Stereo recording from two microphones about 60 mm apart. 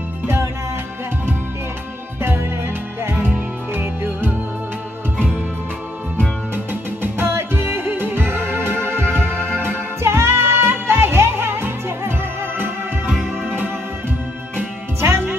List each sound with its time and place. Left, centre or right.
3.0 s music: right
5.1 s music: centre
6.5 s music: right
15.0 s music: right